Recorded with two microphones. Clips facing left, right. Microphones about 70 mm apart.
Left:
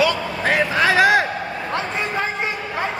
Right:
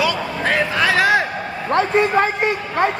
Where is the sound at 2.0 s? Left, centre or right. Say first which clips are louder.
Right 7 dB; right.